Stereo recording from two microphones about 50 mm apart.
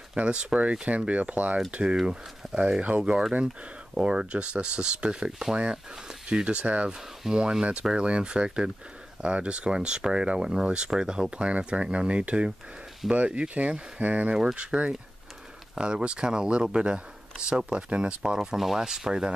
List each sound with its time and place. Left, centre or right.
0.1 s speech: right
7.2 s speech: centre; by 14.3 s right
14.3 s speech: centre
14.6 s speech: right